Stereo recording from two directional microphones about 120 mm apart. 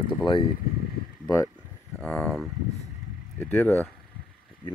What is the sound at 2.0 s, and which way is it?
Speech, 5° left (ahead or behind).